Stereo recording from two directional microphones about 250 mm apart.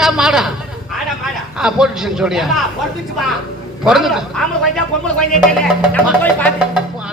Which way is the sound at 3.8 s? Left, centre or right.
Centre.